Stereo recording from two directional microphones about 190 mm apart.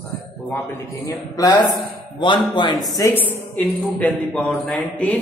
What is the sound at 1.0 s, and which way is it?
A man's voice, 20° left (ahead or behind).